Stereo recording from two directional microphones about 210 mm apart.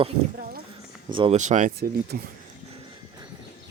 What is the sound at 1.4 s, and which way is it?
Speech, 35° right (ahead or behind).